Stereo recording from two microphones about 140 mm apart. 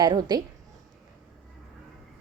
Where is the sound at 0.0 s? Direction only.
30° right (ahead or behind).